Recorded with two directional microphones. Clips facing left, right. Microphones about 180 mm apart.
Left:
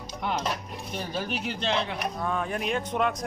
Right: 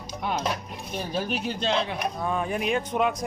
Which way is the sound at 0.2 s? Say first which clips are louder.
Right 1 dB; 10° right (ahead or behind).